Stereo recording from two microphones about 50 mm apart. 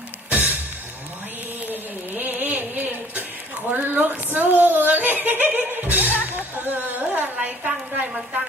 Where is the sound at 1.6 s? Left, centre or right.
Right.